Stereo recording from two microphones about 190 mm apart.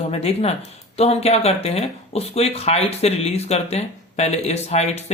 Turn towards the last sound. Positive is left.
turn(degrees=35)  # may be behind; listen again after turning